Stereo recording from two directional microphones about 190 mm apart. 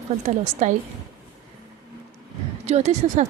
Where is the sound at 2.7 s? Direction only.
35° right (ahead or behind).